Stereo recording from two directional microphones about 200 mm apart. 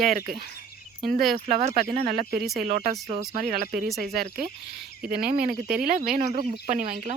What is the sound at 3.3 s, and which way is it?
Speech, 45° right (ahead or behind).